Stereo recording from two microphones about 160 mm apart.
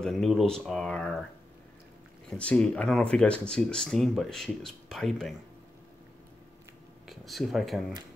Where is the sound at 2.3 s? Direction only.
5° left (ahead or behind).